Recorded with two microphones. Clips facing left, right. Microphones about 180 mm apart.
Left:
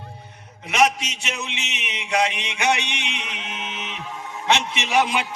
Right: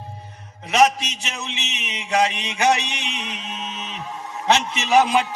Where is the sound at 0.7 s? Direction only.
35° right (ahead or behind).